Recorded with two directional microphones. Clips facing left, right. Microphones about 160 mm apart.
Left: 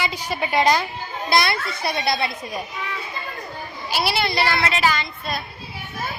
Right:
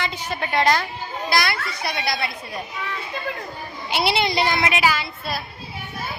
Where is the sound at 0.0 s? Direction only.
10° left (ahead or behind).